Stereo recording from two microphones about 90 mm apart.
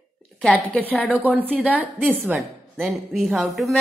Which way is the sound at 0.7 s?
15° left (ahead or behind).